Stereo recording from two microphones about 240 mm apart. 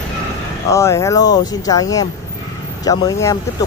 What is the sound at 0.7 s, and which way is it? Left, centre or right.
Speech, centre.